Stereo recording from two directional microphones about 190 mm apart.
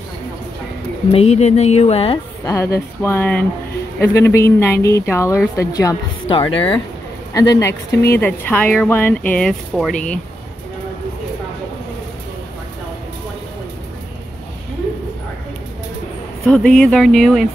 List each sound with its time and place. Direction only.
1.1 s speech: 35° left (ahead or behind)
2.4 s speech: 15° left (ahead or behind)
16.4 s speech: 5° left (ahead or behind)